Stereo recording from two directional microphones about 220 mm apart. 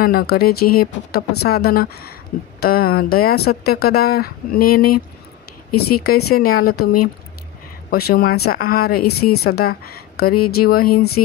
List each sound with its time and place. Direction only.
0.0 s speech: 45° left (ahead or behind)
6.3 s speech: 45° left (ahead or behind)
9.1 s a woman's voice: 90° left
9.4 s speech: 45° left (ahead or behind)